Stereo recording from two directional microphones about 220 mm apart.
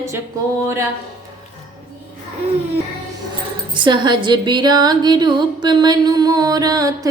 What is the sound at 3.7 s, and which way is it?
Speech, 20° right (ahead or behind).